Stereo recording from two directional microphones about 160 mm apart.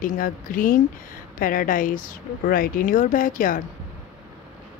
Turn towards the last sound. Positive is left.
turn(degrees=55)  # may be behind; listen again after turning